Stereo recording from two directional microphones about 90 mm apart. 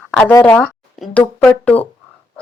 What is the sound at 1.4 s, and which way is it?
Speech, 5° left (ahead or behind).